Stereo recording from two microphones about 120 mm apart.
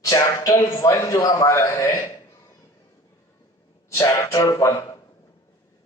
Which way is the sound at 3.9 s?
25° left (ahead or behind).